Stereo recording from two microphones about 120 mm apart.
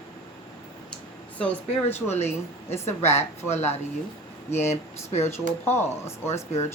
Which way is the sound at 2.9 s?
65° left (ahead or behind).